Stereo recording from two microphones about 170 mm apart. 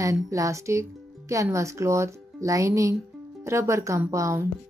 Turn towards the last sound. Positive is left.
turn(degrees=-15)  # may be behind; listen again after turning